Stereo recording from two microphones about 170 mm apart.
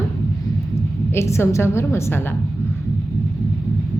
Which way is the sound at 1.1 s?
15° left (ahead or behind).